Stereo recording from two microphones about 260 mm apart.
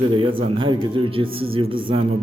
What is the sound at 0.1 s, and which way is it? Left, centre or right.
Speech, centre.